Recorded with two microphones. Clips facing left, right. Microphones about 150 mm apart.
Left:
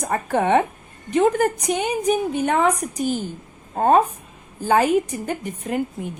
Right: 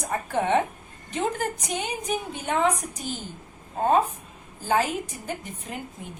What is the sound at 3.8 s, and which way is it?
A woman's voice, 55° left (ahead or behind).